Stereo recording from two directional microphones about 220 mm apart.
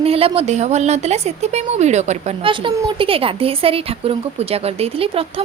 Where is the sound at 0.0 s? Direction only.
25° right (ahead or behind).